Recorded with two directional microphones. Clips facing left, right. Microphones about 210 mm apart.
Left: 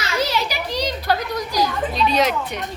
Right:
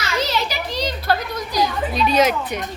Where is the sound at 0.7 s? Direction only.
10° left (ahead or behind).